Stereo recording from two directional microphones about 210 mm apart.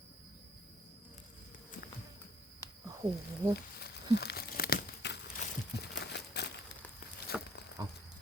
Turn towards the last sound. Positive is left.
turn(degrees=-20)  # may be behind; listen again after turning